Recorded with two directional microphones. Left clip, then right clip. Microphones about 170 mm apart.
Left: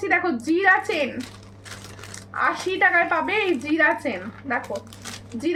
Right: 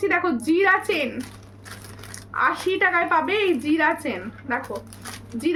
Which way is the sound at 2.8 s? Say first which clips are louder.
Left 2 dB; 20° right (ahead or behind).